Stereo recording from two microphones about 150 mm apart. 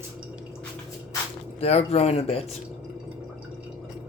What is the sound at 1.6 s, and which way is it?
Speech, 45° left (ahead or behind).